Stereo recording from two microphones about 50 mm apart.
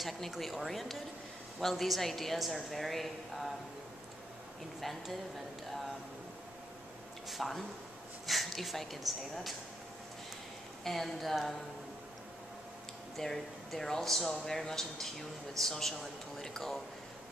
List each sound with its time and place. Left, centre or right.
0.0 s a woman's voice: centre
4.7 s a woman's voice: centre
7.2 s a woman's voice: centre
10.8 s a woman's voice: centre
13.1 s speech: centre